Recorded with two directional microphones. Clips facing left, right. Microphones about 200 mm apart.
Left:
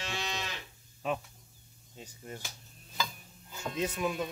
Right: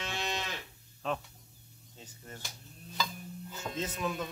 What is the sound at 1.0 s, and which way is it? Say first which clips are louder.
Speech: left 1 dB; 10° left (ahead or behind).